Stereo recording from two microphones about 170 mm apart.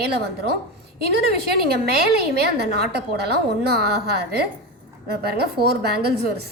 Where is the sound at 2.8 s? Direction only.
75° right (ahead or behind).